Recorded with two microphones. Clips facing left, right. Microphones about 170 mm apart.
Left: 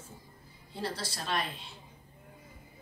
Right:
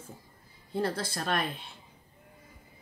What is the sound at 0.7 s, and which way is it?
Speech, 55° right (ahead or behind).